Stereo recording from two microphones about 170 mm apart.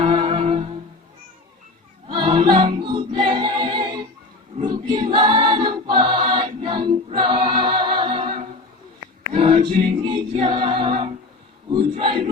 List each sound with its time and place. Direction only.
0.0 s music: 35° right (ahead or behind)
2.0 s music: 30° right (ahead or behind)
4.6 s choir: 25° right (ahead or behind)
9.3 s music: 30° right (ahead or behind)
11.8 s a sound: 30° right (ahead or behind)